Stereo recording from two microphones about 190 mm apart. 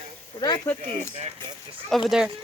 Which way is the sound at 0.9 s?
35° right (ahead or behind).